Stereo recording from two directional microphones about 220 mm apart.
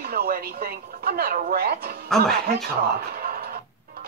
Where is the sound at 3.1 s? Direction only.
45° right (ahead or behind).